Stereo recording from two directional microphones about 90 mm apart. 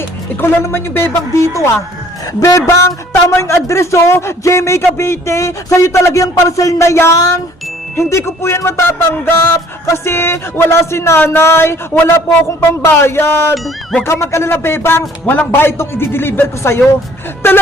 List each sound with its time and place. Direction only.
0.6 s music: 25° left (ahead or behind)
2.4 s speech: 35° left (ahead or behind)
7.9 s music: 30° left (ahead or behind)